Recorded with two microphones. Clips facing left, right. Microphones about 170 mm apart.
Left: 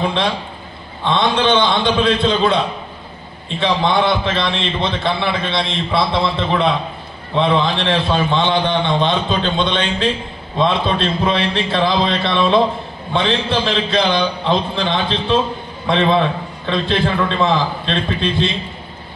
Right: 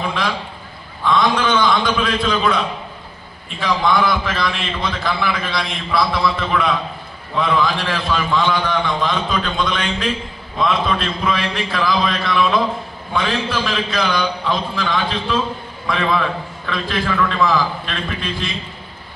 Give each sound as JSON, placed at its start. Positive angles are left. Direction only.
{"t": 0.0, "sound": "a man's voice", "side_deg": 25}